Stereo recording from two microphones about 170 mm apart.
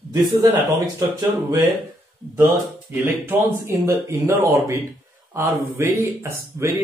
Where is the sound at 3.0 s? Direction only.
15° right (ahead or behind).